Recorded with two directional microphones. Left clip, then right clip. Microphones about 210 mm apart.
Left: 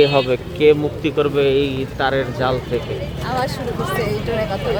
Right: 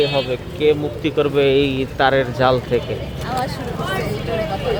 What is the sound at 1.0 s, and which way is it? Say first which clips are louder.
Speech: even; centre (ahead or behind).